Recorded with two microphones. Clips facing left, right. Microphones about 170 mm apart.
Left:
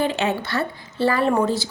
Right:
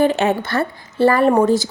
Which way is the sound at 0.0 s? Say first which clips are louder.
Right 6 dB; 50° right (ahead or behind).